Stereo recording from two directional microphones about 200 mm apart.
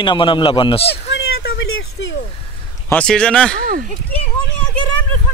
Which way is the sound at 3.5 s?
45° right (ahead or behind).